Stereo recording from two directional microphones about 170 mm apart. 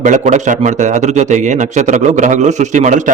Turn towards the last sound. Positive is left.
turn(degrees=-45)  # may be behind; listen again after turning